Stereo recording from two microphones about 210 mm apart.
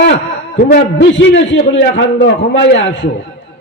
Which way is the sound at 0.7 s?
55° left (ahead or behind).